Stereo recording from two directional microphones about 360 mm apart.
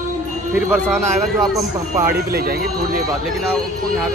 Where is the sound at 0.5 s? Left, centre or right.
Centre.